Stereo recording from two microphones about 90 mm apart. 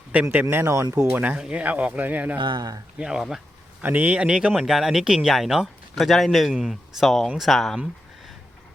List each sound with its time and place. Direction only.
0.5 s speech: 25° right (ahead or behind)
2.4 s speech: 50° right (ahead or behind)
3.0 s speech: 10° right (ahead or behind)
3.8 s speech: 20° right (ahead or behind); by 7.8 s centre (ahead or behind)